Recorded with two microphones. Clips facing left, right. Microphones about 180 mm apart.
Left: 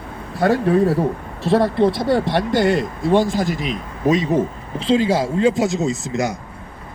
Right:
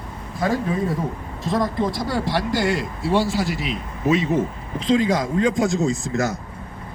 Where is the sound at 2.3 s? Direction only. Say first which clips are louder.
Left 5 dB; 55° left (ahead or behind).